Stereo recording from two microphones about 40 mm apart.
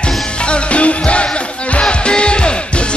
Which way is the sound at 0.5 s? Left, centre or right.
Left.